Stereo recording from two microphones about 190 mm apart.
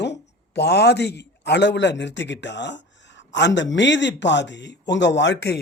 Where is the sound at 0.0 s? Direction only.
65° left (ahead or behind).